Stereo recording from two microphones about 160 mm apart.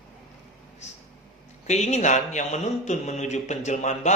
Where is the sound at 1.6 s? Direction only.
45° left (ahead or behind).